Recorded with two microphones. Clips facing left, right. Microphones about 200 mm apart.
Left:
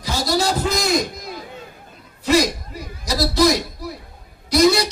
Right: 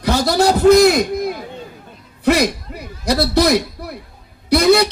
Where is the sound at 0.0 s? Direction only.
60° right (ahead or behind).